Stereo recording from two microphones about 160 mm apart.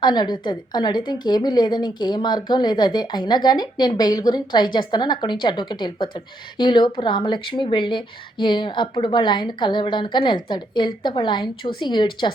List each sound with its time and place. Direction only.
0.0 s a woman's voice: 25° left (ahead or behind)